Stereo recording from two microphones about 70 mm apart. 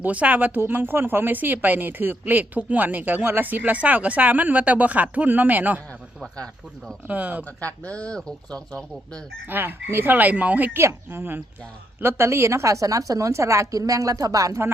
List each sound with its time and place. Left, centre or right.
0.0 s speech: right
6.3 s speech: centre
7.1 s speech: right
7.9 s speech: centre
9.5 s speech: right
10.8 s a woman's voice: right